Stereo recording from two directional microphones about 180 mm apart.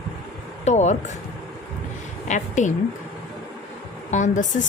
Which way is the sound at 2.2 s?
40° left (ahead or behind).